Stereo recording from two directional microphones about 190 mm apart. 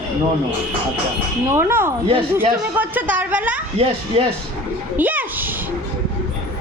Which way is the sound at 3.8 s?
30° right (ahead or behind).